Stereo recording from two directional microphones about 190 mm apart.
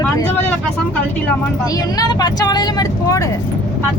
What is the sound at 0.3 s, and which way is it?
Vehicle, 10° left (ahead or behind).